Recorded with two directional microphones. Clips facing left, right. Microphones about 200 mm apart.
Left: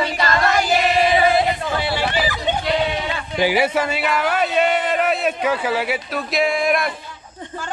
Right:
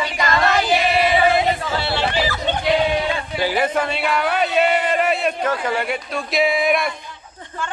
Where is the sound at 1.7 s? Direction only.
15° left (ahead or behind).